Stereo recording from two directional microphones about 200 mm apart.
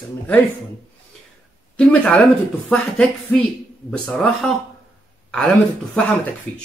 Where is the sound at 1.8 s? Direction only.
5° left (ahead or behind).